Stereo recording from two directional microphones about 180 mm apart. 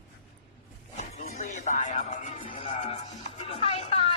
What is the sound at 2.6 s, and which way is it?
Music, 30° left (ahead or behind).